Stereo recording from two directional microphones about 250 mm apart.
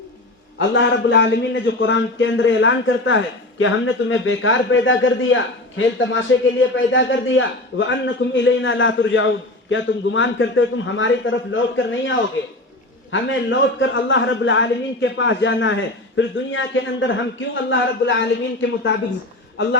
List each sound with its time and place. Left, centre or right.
0.7 s a man's voice: left